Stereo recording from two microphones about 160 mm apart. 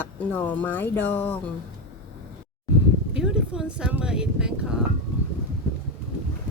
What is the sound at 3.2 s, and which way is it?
Speech, 5° right (ahead or behind).